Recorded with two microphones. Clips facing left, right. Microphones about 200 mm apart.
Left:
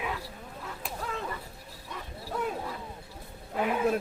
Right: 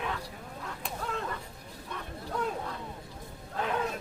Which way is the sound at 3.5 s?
10° left (ahead or behind).